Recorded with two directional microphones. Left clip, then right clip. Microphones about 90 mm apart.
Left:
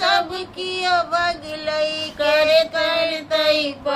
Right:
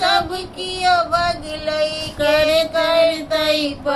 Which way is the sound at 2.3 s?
35° left (ahead or behind).